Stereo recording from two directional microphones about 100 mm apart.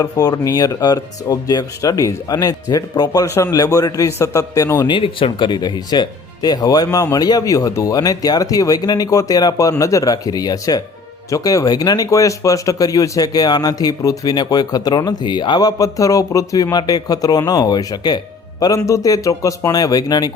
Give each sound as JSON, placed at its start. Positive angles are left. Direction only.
{"t": 0.0, "sound": "speech", "side_deg": 40}
{"t": 4.9, "sound": "speech", "side_deg": 60}
{"t": 18.9, "sound": "speech", "side_deg": 35}